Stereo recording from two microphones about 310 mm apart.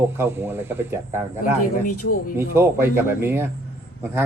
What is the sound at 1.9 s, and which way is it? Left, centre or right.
Speech, left.